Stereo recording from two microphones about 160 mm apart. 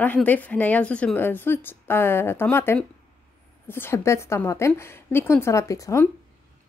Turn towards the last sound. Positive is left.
turn(degrees=20)  # may be behind; listen again after turning